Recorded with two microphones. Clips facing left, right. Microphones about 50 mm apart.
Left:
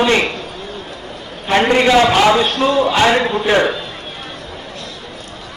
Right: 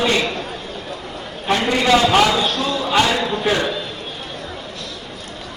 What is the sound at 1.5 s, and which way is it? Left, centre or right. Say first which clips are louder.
A man's voice: left 4 dB; left.